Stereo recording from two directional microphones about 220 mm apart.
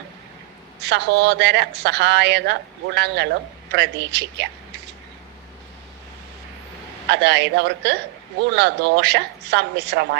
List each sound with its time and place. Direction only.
0.8 s a woman's voice: 50° right (ahead or behind)
7.1 s a woman's voice: 50° right (ahead or behind)